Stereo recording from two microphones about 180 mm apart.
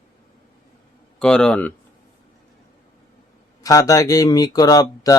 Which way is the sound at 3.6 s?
20° left (ahead or behind).